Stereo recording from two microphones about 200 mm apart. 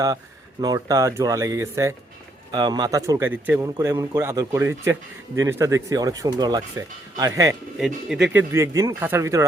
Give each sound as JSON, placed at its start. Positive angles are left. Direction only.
{"t": 0.6, "sound": "speech", "side_deg": -20}
{"t": 7.8, "sound": "speech", "side_deg": -5}